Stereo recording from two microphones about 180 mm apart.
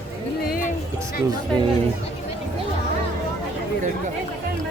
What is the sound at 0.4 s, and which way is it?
Music, 55° left (ahead or behind).